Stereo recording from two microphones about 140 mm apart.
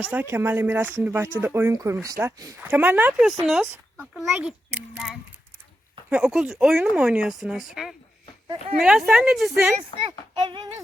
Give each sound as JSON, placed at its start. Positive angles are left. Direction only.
{"t": 0.0, "sound": "speech", "side_deg": -10}
{"t": 10.1, "sound": "speech", "side_deg": -30}